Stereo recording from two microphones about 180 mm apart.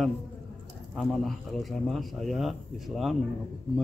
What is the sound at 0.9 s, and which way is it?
Speech, centre (ahead or behind).